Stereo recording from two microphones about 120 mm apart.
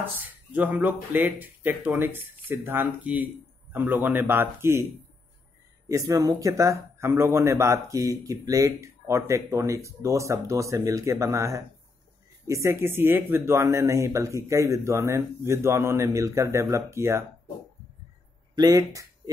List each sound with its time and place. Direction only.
0.2 s speech: 10° right (ahead or behind)
5.9 s speech: 25° right (ahead or behind)
18.7 s speech: 25° right (ahead or behind)